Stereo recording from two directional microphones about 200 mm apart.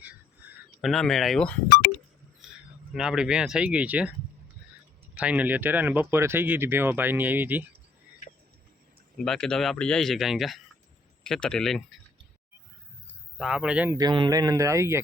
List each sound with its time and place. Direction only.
0.4 s a sound: 10° right (ahead or behind)
0.8 s speech: centre (ahead or behind)
2.4 s a sound: centre (ahead or behind)
2.9 s speech: 5° right (ahead or behind)
5.2 s speech: 5° right (ahead or behind)
9.1 s speech: 5° left (ahead or behind)
13.4 s speech: 5° right (ahead or behind)
13.9 s speech: 20° right (ahead or behind)